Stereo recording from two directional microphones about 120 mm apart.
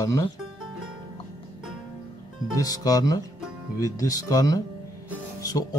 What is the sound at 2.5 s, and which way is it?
Speech, 30° left (ahead or behind).